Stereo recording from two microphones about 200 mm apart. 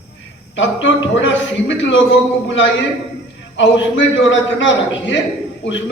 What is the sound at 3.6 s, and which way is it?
A man's voice, 65° left (ahead or behind).